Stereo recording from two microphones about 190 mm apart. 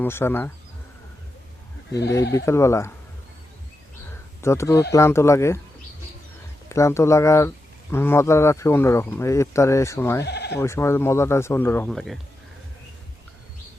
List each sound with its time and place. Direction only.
0.0 s speech: 10° left (ahead or behind)
2.3 s speech: 15° left (ahead or behind)
4.4 s speech: 15° left (ahead or behind)
6.7 s speech: 15° left (ahead or behind)
10.2 s speech: 60° left (ahead or behind)
10.6 s speech: 15° left (ahead or behind)